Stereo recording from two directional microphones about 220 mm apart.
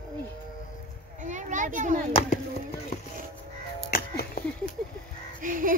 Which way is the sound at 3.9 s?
40° left (ahead or behind).